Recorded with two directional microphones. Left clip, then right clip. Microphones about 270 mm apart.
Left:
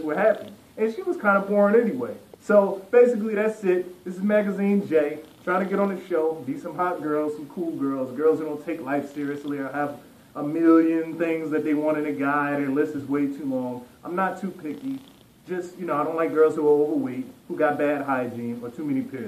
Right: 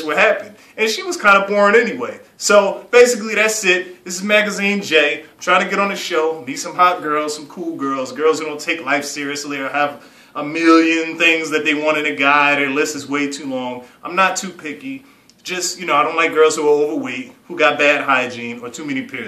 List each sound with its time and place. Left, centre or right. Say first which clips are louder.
0.0 s a man's voice: right 7 dB; centre